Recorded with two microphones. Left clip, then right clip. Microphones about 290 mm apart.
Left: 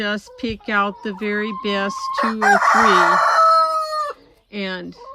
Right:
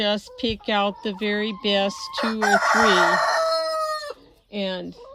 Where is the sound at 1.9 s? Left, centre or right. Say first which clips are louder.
Left 7 dB; centre.